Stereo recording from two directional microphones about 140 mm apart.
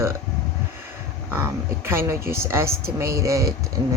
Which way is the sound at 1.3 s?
15° right (ahead or behind).